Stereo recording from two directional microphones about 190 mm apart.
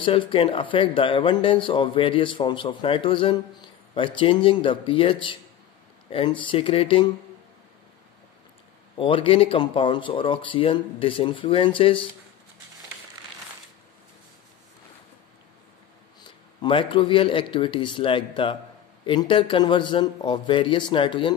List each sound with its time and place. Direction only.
0.0 s speech: 25° left (ahead or behind)
8.9 s speech: 25° left (ahead or behind)
16.2 s speech: 25° left (ahead or behind)